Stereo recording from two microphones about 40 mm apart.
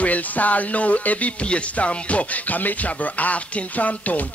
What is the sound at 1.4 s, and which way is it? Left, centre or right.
Speech, left.